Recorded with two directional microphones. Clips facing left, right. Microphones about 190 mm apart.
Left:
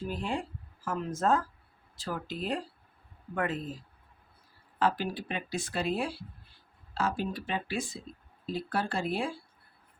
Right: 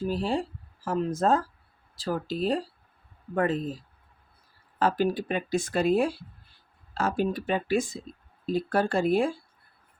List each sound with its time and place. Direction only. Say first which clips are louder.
0.1 s speech: right 5 dB; 35° right (ahead or behind)
4.8 s speech: right 5 dB; 45° right (ahead or behind)